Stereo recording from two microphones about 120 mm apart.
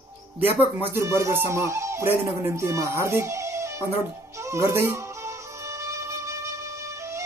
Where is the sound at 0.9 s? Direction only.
25° right (ahead or behind).